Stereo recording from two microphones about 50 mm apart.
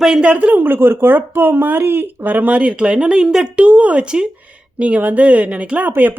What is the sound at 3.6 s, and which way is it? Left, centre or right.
Speech, right.